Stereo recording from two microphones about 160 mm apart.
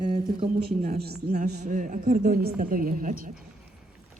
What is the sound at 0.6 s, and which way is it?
Speech, 70° right (ahead or behind).